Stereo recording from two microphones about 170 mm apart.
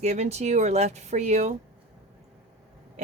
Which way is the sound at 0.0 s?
40° right (ahead or behind).